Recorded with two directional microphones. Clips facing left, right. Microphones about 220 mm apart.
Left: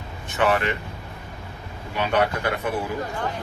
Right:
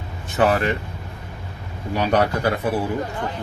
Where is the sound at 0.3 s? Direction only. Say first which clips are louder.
Right 3 dB; 40° right (ahead or behind).